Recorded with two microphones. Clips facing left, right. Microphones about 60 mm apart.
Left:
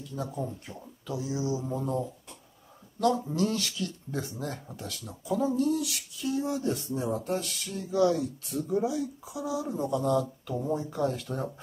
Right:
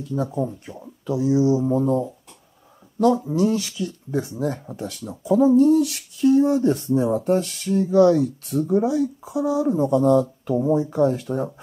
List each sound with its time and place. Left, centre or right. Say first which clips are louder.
0.3 s speech: right 9 dB; centre
1.0 s speech: right 13 dB; right
3.3 s speech: right 8 dB; centre
5.6 s speech: right 11 dB; right